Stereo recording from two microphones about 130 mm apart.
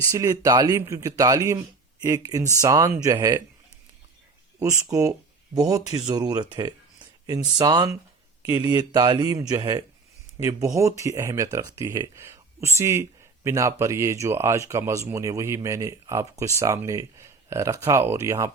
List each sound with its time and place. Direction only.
0.0 s speech: 25° right (ahead or behind)
4.7 s speech: 25° right (ahead or behind)